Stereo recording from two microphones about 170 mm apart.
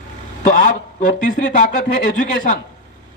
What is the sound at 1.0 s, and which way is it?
A man's voice, 50° left (ahead or behind).